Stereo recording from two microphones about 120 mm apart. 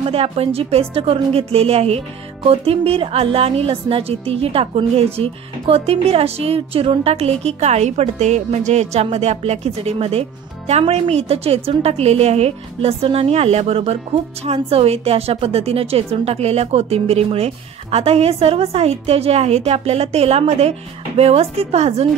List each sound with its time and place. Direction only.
0.0 s a woman's voice: 55° right (ahead or behind)